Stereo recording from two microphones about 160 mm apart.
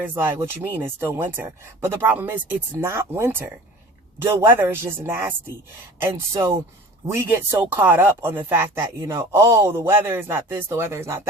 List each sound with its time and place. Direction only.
0.1 s speech: 10° right (ahead or behind)